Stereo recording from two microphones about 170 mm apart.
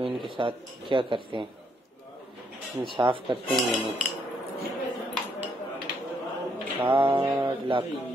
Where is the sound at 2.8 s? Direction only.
30° right (ahead or behind).